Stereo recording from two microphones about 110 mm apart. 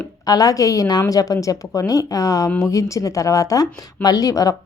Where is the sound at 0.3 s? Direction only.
35° left (ahead or behind).